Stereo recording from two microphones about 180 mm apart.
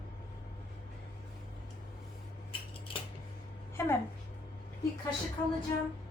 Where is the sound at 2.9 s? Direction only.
30° left (ahead or behind).